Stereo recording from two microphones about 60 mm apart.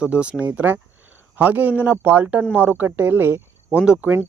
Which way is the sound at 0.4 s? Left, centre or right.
Right.